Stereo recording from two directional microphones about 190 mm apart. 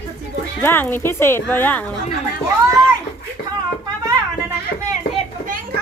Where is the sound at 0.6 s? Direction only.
10° left (ahead or behind).